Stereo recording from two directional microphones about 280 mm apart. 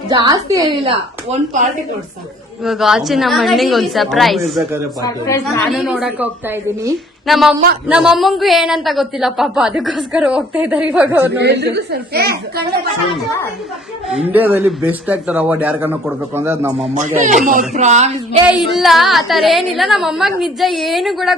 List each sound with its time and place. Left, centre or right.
0.1 s a woman's voice: centre
2.6 s a man's voice: centre
5.0 s a woman's voice: centre
5.6 s a man's voice: centre
11.3 s speech: right
14.1 s a man's voice: centre
17.2 s a woman's voice: right
18.7 s a man's voice: centre